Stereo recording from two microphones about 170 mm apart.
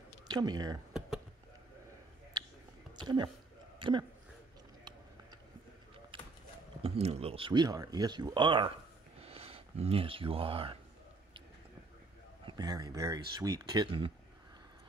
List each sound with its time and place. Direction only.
0.3 s speech: 25° right (ahead or behind)
2.3 s a sound: 25° right (ahead or behind)
6.8 s speech: 35° right (ahead or behind)
12.4 s speech: 25° right (ahead or behind)